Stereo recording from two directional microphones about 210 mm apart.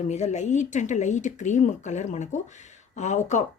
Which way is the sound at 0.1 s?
35° left (ahead or behind).